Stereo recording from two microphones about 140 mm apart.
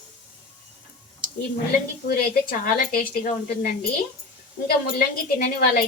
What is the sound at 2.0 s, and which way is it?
Speech, 90° left.